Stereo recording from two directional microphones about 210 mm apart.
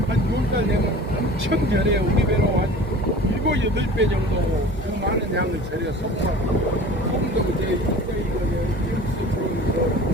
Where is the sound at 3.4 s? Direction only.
60° right (ahead or behind).